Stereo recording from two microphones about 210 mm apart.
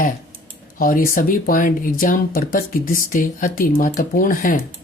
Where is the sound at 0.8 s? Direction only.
40° left (ahead or behind).